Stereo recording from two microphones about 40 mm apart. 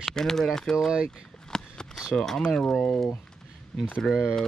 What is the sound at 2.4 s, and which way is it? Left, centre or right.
Speech, left.